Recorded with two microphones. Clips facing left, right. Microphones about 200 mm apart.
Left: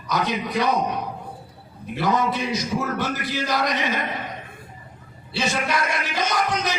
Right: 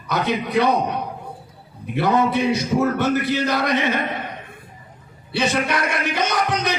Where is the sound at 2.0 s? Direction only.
60° right (ahead or behind).